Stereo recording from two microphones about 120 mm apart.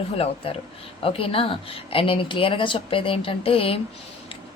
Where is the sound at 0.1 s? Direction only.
55° left (ahead or behind).